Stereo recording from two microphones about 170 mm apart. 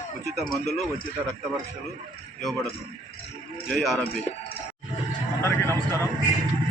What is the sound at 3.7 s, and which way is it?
Speech, centre (ahead or behind).